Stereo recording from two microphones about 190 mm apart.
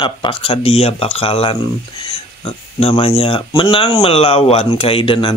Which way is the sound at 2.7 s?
30° left (ahead or behind).